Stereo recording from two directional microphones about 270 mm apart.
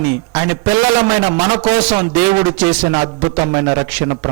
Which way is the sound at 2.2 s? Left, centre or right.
Centre.